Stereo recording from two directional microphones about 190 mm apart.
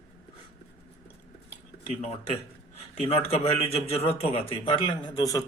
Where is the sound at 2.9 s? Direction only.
30° left (ahead or behind).